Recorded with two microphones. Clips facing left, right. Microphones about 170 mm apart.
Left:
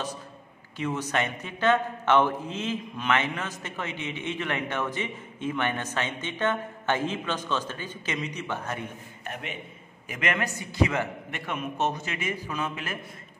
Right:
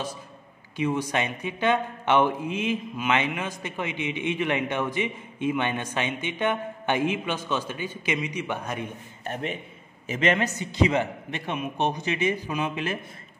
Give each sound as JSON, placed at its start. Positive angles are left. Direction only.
{"t": 0.7, "sound": "a man's voice", "side_deg": -10}
{"t": 9.2, "sound": "a man's voice", "side_deg": -35}